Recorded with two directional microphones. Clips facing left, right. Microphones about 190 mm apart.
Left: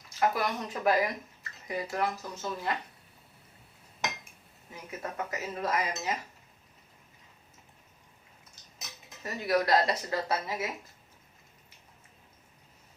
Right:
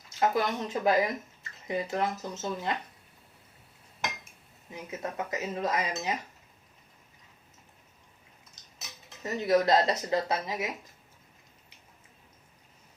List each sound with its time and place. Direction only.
0.2 s speech: 25° right (ahead or behind)
4.7 s speech: 20° right (ahead or behind)
9.2 s speech: 25° right (ahead or behind)